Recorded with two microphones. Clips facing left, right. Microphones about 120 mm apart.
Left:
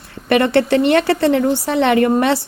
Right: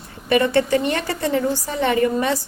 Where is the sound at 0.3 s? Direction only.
75° left (ahead or behind).